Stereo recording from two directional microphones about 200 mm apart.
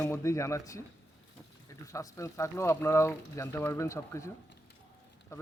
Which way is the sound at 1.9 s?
15° left (ahead or behind).